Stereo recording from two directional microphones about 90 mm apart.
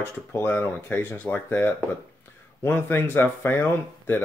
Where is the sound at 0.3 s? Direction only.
25° left (ahead or behind).